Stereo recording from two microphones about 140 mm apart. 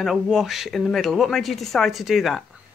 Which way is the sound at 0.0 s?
Centre (ahead or behind).